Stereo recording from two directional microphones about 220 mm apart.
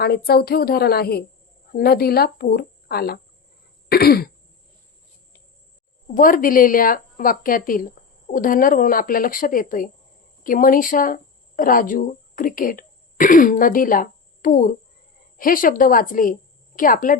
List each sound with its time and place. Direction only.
0.0 s speech: 45° left (ahead or behind)
6.1 s a woman's voice: 40° left (ahead or behind)